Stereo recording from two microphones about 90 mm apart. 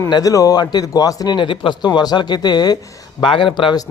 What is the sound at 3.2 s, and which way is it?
Speech, 70° left (ahead or behind).